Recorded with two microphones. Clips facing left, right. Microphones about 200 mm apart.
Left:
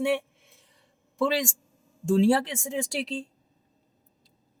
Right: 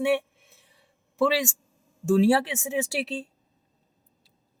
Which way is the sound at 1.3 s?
5° right (ahead or behind).